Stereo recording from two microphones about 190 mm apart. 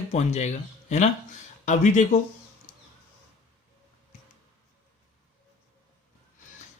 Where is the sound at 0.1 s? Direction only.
35° left (ahead or behind).